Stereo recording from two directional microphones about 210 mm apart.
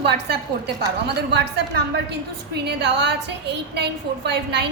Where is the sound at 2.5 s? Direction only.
55° right (ahead or behind).